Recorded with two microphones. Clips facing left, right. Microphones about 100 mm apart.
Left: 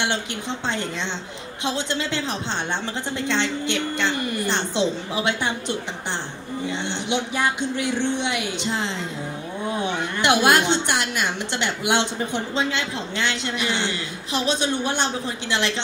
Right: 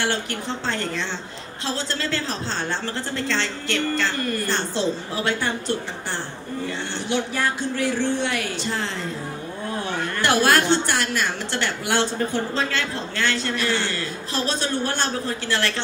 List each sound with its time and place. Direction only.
0.0 s a woman's voice: 20° left (ahead or behind)